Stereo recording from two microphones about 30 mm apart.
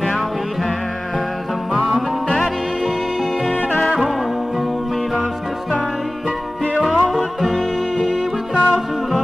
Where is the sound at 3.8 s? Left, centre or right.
Centre.